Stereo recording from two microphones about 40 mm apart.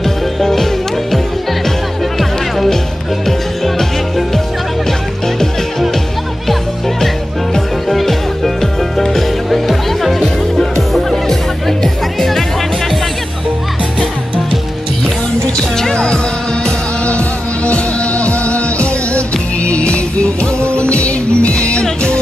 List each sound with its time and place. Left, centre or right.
0.0 s music: centre
2.1 s music: centre
7.9 s music: centre
15.9 s music: left
16.6 s music: left